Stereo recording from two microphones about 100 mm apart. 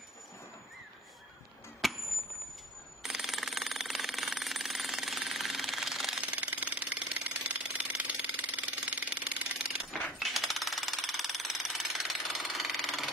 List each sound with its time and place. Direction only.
1.8 s chop: centre (ahead or behind)
3.0 s jackhammer: 5° right (ahead or behind)
6.2 s jackhammer: 15° right (ahead or behind)
10.1 s a sound: centre (ahead or behind)